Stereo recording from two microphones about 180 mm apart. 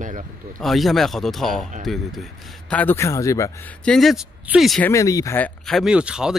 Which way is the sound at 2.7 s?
10° left (ahead or behind).